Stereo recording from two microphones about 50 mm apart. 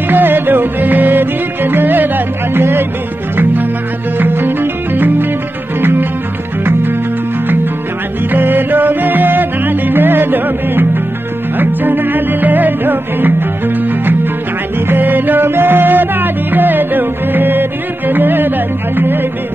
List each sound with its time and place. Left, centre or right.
0.1 s music: right
4.2 s music: right
8.3 s music: right